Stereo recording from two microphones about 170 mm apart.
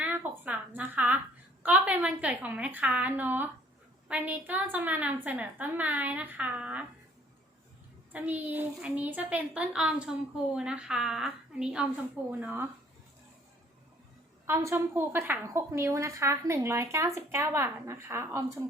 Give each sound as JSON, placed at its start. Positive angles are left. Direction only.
{"t": 0.0, "sound": "a sound", "side_deg": -10}
{"t": 1.6, "sound": "a woman's voice", "side_deg": -10}
{"t": 8.1, "sound": "a woman's voice", "side_deg": -10}
{"t": 14.4, "sound": "a woman's voice", "side_deg": -15}